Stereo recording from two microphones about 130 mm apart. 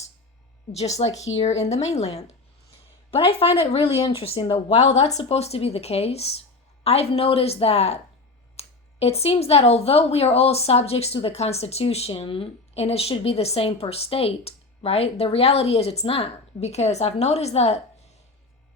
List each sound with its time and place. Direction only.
0.7 s speech: 55° left (ahead or behind)